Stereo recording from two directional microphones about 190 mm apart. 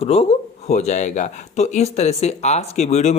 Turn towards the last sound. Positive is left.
turn(degrees=35)  # may be behind; listen again after turning